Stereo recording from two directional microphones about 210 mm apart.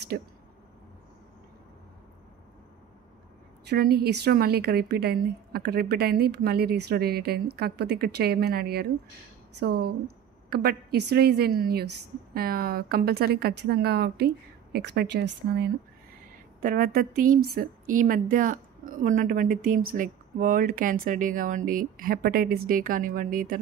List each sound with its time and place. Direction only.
0.1 s a woman's voice: 45° right (ahead or behind)
3.6 s a woman's voice: 50° right (ahead or behind)